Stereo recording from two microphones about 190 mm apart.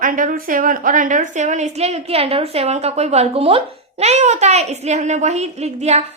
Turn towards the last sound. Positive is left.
turn(degrees=-35)  # may be behind; listen again after turning